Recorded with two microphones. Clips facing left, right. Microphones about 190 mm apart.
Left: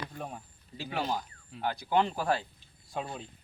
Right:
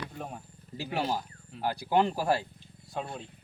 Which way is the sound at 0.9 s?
5° right (ahead or behind).